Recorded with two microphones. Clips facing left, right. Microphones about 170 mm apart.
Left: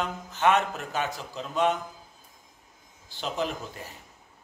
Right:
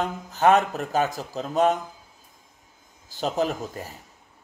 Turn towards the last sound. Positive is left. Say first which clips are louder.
# right 5 dB
turn(degrees=-40)  # may be behind; listen again after turning